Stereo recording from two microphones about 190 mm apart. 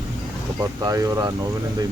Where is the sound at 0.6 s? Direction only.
20° right (ahead or behind).